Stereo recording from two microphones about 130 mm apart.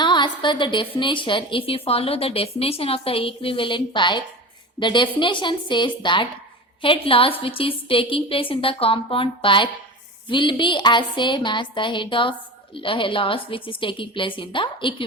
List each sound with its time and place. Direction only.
0.0 s a woman's voice: 35° left (ahead or behind)